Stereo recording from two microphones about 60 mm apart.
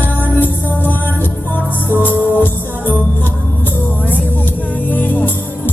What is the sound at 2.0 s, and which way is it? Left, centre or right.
Music, left.